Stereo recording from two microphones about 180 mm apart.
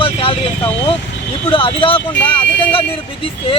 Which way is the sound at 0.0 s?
30° left (ahead or behind).